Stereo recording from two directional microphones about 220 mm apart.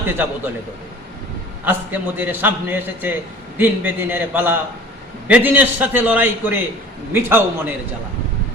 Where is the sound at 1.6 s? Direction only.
10° right (ahead or behind).